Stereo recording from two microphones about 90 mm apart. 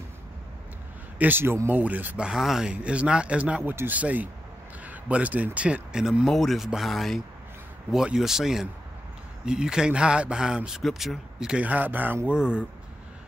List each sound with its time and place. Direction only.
1.1 s speech: 20° right (ahead or behind)
2.2 s speech: 5° right (ahead or behind)
11.6 s speech: 20° right (ahead or behind)